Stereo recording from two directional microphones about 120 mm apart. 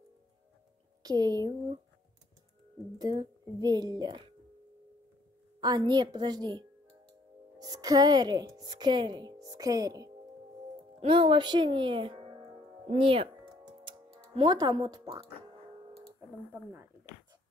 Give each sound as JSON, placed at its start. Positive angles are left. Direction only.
{"t": 1.0, "sound": "a woman's voice", "side_deg": -35}
{"t": 3.0, "sound": "a woman's voice", "side_deg": -35}
{"t": 5.6, "sound": "a woman's voice", "side_deg": -35}
{"t": 11.0, "sound": "speech", "side_deg": -45}
{"t": 13.8, "sound": "music", "side_deg": -40}